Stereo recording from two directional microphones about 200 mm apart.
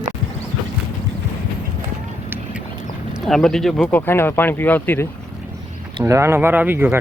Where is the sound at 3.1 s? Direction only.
Centre (ahead or behind).